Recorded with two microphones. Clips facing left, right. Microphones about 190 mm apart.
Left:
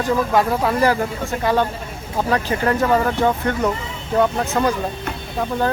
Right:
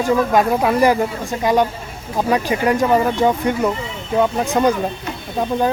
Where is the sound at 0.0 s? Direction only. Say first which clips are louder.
Right 2 dB; 15° right (ahead or behind).